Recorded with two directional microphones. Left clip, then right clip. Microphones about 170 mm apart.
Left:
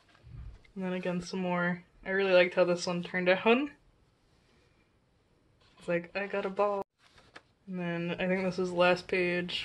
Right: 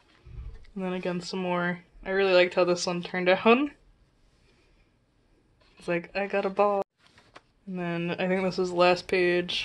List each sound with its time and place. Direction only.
0.7 s speech: 35° right (ahead or behind)
5.9 s speech: 45° right (ahead or behind)
6.8 s a sound: 5° left (ahead or behind)
7.7 s speech: 40° right (ahead or behind)